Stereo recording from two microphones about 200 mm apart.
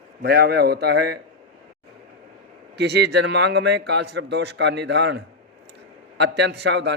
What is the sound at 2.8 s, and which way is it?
A man's voice, 55° right (ahead or behind).